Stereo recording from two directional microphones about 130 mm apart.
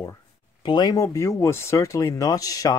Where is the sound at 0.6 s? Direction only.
35° left (ahead or behind).